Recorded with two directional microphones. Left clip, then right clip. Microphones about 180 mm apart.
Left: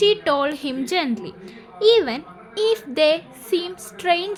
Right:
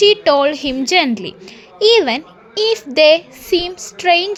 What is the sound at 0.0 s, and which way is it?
A woman's voice, 25° right (ahead or behind).